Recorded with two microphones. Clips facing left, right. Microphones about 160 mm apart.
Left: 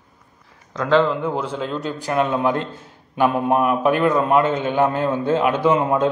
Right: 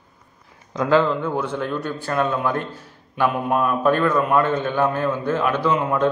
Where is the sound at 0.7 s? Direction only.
10° right (ahead or behind).